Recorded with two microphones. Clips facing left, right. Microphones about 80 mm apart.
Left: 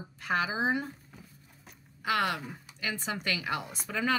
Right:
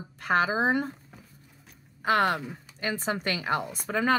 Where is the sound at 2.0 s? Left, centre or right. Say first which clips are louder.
Right 5 dB; right.